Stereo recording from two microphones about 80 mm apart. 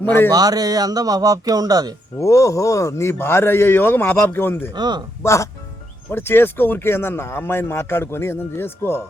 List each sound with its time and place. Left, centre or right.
0.0 s speech: left
0.3 s speech: right
2.2 s speech: left
4.7 s speech: right
5.2 s speech: left
6.1 s speech: left